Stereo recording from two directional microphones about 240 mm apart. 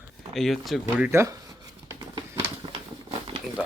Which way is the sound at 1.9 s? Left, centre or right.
Centre.